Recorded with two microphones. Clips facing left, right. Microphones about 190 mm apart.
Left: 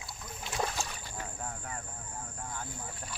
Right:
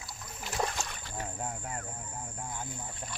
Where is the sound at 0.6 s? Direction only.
5° left (ahead or behind).